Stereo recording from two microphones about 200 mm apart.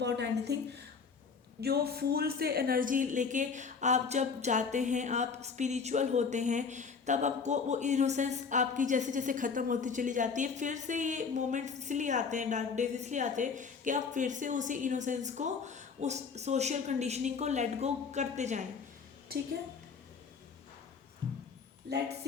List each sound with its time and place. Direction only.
0.0 s a woman's voice: 55° right (ahead or behind); by 18.6 s 35° right (ahead or behind)
19.3 s a woman's voice: 50° right (ahead or behind)
21.8 s a woman's voice: 55° right (ahead or behind)